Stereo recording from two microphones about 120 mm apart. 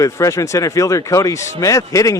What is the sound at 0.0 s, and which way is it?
A man's voice, 25° left (ahead or behind).